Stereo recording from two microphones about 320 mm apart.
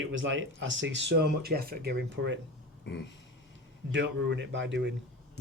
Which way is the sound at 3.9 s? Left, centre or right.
Right.